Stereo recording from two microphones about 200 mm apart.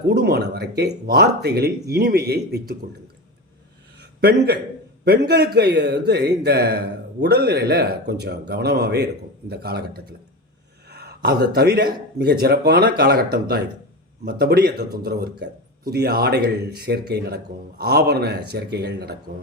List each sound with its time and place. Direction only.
0.1 s a man's voice: 50° right (ahead or behind)
4.0 s a sound: 55° right (ahead or behind)
5.3 s a man's voice: 55° right (ahead or behind)